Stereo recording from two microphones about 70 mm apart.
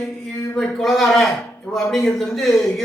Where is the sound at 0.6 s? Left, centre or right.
Centre.